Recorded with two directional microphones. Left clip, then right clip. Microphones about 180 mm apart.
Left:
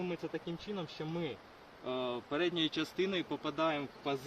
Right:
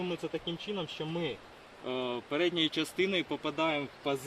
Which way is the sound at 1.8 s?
15° left (ahead or behind).